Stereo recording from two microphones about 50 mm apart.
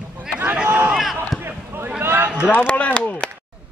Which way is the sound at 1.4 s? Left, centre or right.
Right.